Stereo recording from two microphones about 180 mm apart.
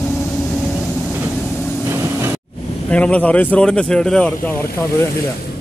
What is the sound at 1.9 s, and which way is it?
Vehicle, 15° right (ahead or behind).